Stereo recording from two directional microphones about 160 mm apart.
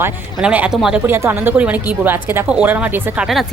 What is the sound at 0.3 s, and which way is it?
Speech, 5° right (ahead or behind).